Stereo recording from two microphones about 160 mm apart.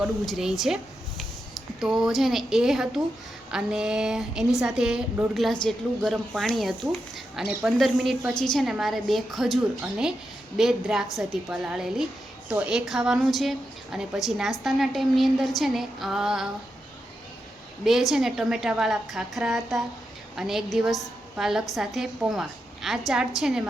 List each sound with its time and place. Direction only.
0.0 s a woman's voice: 5° right (ahead or behind)
1.8 s a woman's voice: centre (ahead or behind)
17.8 s a woman's voice: centre (ahead or behind)